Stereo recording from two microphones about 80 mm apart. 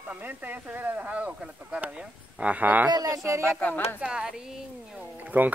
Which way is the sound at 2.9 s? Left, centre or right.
Right.